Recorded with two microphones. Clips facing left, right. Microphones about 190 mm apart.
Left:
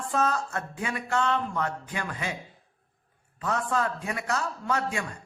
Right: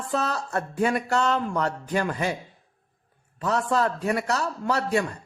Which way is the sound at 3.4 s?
35° right (ahead or behind).